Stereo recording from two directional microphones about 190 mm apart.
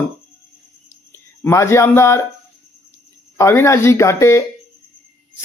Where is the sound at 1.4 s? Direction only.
15° left (ahead or behind).